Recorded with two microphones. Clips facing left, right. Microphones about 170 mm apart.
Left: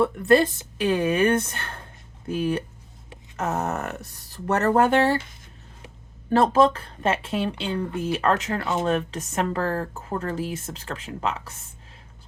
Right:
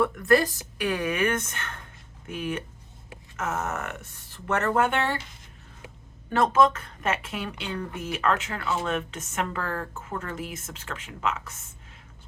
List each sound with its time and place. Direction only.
0.0 s speech: 30° left (ahead or behind)
6.3 s speech: 35° left (ahead or behind)